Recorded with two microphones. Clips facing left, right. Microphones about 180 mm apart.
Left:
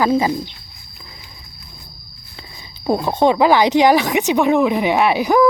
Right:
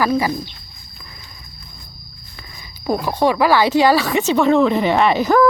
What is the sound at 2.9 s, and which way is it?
Speech, 25° left (ahead or behind).